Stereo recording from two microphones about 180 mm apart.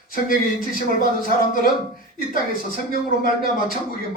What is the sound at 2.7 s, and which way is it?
Speech, 55° left (ahead or behind).